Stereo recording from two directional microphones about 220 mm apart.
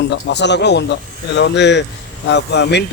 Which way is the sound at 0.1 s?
50° left (ahead or behind).